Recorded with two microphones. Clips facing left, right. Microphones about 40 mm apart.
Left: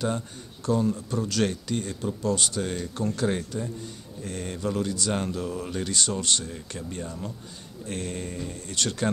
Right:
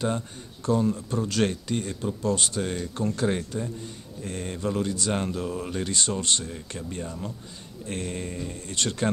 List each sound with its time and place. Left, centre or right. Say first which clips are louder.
0.0 s speech: right 1 dB; right
3.3 s speech: right 1 dB; centre
6.5 s speech: right 1 dB; centre